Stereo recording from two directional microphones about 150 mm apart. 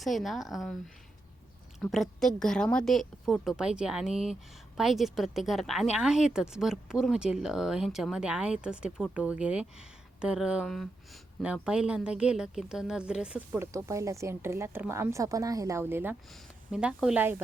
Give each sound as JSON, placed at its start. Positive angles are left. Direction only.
{"t": 0.0, "sound": "speech", "side_deg": 0}
{"t": 1.8, "sound": "speech", "side_deg": 0}
{"t": 13.7, "sound": "a woman's voice", "side_deg": -20}